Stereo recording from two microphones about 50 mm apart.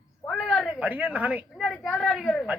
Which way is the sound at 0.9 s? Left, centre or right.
Right.